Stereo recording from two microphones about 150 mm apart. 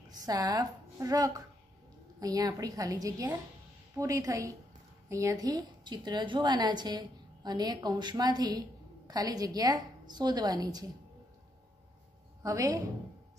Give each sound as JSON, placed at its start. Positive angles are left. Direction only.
{"t": 0.2, "sound": "a woman's voice", "side_deg": -25}
{"t": 12.4, "sound": "a woman's voice", "side_deg": -25}